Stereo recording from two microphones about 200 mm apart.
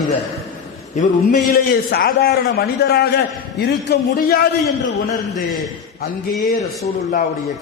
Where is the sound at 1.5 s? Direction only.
50° left (ahead or behind).